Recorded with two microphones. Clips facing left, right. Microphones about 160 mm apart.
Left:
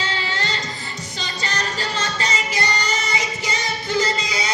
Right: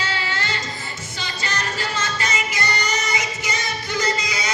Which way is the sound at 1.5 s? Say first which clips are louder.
Even; 35° left (ahead or behind).